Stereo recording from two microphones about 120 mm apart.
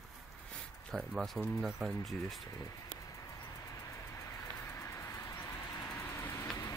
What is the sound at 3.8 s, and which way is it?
Vehicle, 25° left (ahead or behind).